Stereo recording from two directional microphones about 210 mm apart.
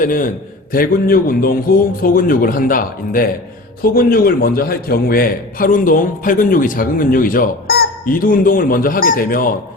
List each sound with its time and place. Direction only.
0.0 s a man's voice: 40° left (ahead or behind)